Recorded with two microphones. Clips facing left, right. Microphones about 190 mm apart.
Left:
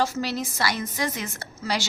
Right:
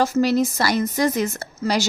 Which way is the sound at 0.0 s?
45° right (ahead or behind).